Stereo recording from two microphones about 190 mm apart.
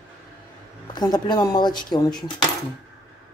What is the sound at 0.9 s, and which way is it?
Speech, 20° left (ahead or behind).